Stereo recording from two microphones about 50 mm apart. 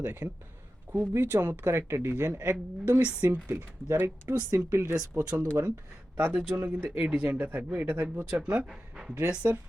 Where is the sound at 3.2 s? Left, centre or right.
Right.